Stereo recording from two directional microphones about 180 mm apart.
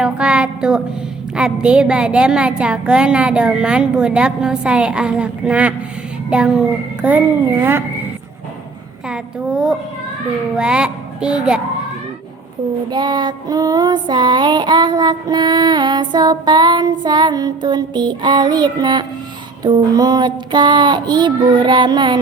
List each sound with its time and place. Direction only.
0.0 s a woman's voice: 5° right (ahead or behind)
9.0 s a woman's voice: 5° right (ahead or behind)
12.9 s child singing: 25° right (ahead or behind)